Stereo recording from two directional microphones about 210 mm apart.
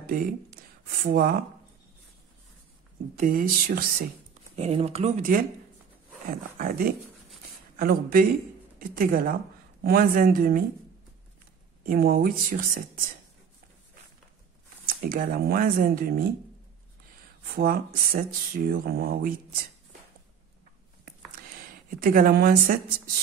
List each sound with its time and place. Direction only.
0.0 s speech: 45° right (ahead or behind)
3.2 s speech: 40° right (ahead or behind)
4.6 s speech: 30° right (ahead or behind)
6.6 s speech: 45° right (ahead or behind)
11.8 s speech: 45° right (ahead or behind)
14.9 s speech: 45° right (ahead or behind)
17.6 s speech: 45° right (ahead or behind)
22.0 s speech: 45° right (ahead or behind)